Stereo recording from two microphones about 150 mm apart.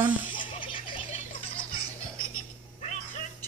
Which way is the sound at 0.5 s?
35° left (ahead or behind).